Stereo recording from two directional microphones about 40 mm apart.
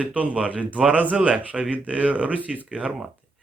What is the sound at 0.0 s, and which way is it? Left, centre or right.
Speech, right.